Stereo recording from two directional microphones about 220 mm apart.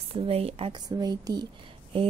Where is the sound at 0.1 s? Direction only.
25° right (ahead or behind).